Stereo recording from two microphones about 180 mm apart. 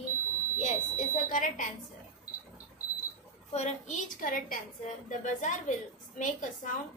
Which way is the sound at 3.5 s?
40° left (ahead or behind).